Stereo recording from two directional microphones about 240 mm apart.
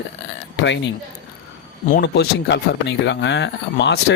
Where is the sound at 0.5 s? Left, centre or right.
Left.